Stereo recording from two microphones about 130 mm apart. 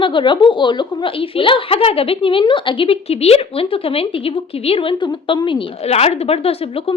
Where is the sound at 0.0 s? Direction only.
40° left (ahead or behind).